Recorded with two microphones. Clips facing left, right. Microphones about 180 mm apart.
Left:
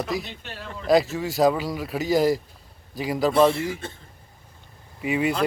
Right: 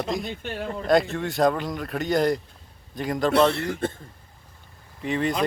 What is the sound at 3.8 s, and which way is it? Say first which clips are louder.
Speech: right 9 dB; 55° right (ahead or behind).